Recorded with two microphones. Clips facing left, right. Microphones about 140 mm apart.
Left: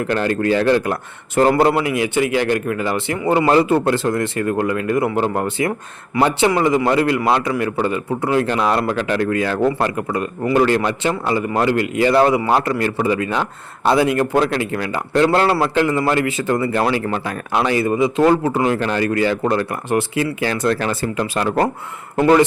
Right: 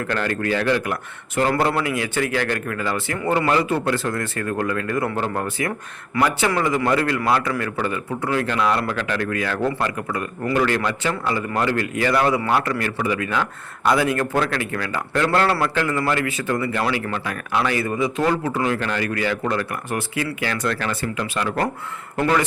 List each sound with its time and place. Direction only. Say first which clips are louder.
0.0 s speech: left 5 dB; 25° left (ahead or behind)
3.4 s a man's voice: left 6 dB; 30° left (ahead or behind)
17.6 s speech: left 5 dB; 25° left (ahead or behind)